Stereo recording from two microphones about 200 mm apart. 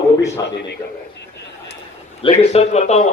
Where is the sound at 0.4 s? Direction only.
20° left (ahead or behind).